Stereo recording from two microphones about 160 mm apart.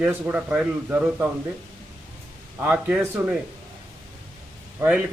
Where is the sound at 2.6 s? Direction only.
15° right (ahead or behind).